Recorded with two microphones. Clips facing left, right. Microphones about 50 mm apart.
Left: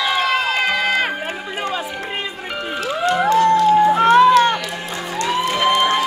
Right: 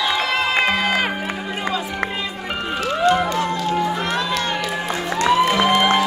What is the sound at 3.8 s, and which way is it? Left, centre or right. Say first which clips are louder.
Music: left 10 dB; left.